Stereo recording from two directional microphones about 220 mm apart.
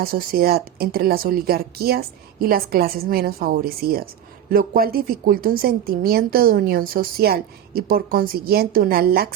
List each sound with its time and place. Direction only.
0.0 s a woman's voice: 40° right (ahead or behind)